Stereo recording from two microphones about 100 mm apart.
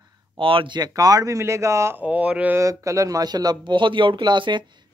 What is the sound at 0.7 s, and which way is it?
Speech, 40° right (ahead or behind).